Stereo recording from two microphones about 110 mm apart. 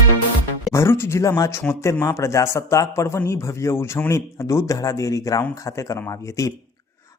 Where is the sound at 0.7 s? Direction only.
25° left (ahead or behind).